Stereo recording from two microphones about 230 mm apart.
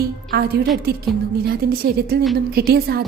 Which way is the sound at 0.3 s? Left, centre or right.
Right.